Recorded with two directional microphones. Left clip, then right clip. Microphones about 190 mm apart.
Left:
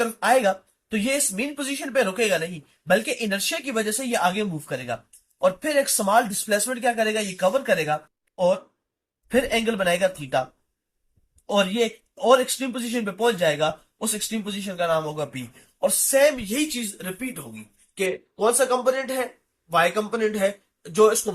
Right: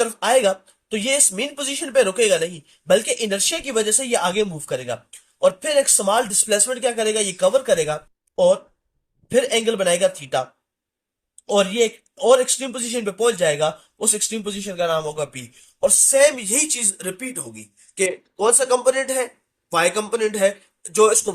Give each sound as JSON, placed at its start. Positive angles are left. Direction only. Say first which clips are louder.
{"t": 0.0, "sound": "a man's voice", "louder": "right 2 dB", "side_deg": -45}
{"t": 9.3, "sound": "a man's voice", "louder": "right 4 dB", "side_deg": -40}
{"t": 11.8, "sound": "a man's voice", "louder": "right 4 dB", "side_deg": -45}
{"t": 16.1, "sound": "speech", "louder": "right 1 dB", "side_deg": -55}